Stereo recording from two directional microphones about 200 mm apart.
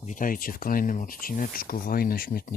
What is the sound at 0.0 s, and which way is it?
Speech, 40° left (ahead or behind).